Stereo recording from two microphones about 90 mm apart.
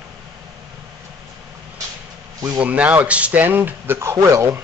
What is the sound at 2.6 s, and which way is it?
Speech, 15° right (ahead or behind).